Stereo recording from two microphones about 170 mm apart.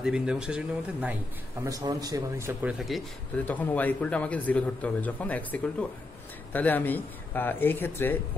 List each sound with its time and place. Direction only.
0.0 s speech: 5° right (ahead or behind)
1.6 s a man's voice: 20° right (ahead or behind)
2.9 s speech: centre (ahead or behind)